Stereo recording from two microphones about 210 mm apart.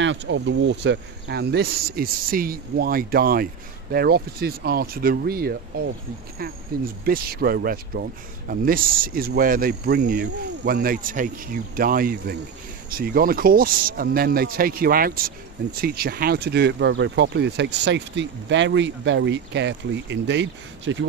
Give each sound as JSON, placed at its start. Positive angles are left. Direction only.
{"t": 0.0, "sound": "speech", "side_deg": -60}